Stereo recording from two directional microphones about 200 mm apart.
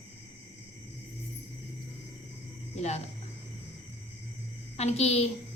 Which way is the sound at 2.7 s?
35° left (ahead or behind).